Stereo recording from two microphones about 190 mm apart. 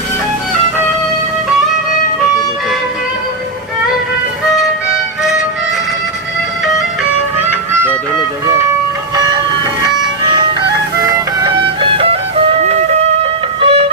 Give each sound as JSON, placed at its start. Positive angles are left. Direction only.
{"t": 9.1, "sound": "vehicle", "side_deg": -20}
{"t": 11.0, "sound": "music", "side_deg": -25}